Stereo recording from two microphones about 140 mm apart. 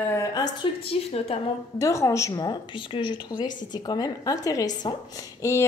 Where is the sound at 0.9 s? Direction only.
45° left (ahead or behind).